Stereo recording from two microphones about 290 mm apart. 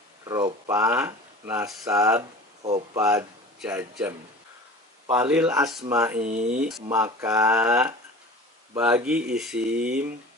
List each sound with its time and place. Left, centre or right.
0.2 s speech: centre
5.1 s speech: centre
6.1 s speech: right
6.6 s speech: centre